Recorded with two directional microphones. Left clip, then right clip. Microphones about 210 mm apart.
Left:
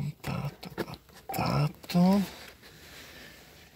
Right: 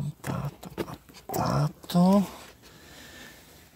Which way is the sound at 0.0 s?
10° right (ahead or behind).